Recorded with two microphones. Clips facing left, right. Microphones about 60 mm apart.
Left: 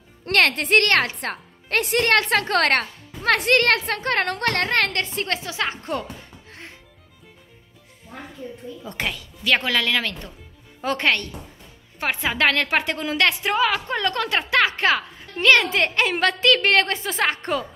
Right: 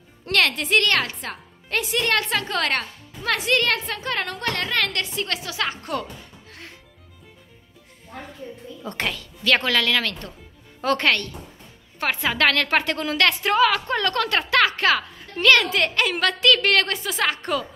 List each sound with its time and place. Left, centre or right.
0.2 s a woman's voice: left
8.8 s a woman's voice: centre; by 17.6 s left